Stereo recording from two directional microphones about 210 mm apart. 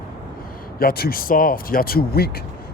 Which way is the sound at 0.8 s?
45° left (ahead or behind).